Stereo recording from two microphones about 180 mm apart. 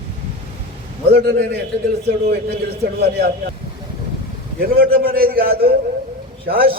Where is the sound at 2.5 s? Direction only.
65° right (ahead or behind).